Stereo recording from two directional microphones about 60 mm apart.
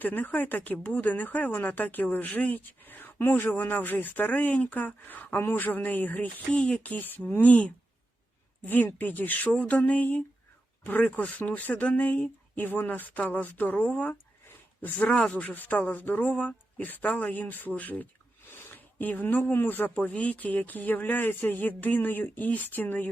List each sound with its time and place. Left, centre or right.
0.0 s speech: left
14.9 s speech: left
15.5 s speech: left
18.5 s a sound: left
19.5 s speech: left